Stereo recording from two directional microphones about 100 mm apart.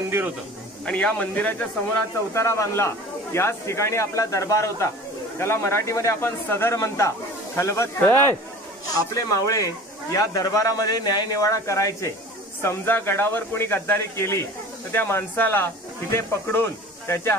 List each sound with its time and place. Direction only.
0.8 s speech: 10° left (ahead or behind)
2.3 s speech: 30° left (ahead or behind)